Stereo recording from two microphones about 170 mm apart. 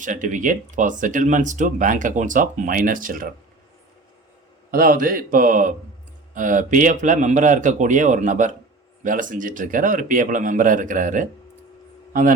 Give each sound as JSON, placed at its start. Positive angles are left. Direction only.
{"t": 0.0, "sound": "speech", "side_deg": -50}
{"t": 4.7, "sound": "a man's voice", "side_deg": -55}